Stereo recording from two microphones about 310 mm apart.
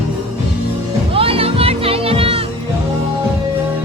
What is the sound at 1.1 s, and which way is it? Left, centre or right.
Music, centre.